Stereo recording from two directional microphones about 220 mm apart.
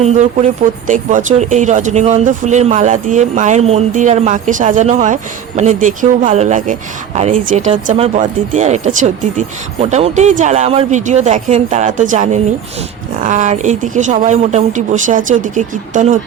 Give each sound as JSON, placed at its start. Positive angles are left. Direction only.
{"t": 0.0, "sound": "speech", "side_deg": -35}